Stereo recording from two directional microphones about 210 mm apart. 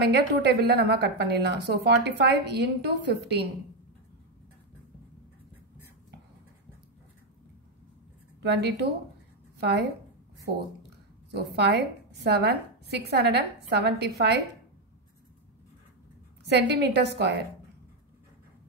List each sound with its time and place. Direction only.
0.0 s a woman's voice: 55° right (ahead or behind)
8.4 s a woman's voice: 50° right (ahead or behind)
16.4 s a woman's voice: 55° right (ahead or behind)